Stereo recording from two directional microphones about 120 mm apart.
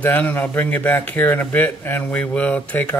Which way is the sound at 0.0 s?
15° left (ahead or behind).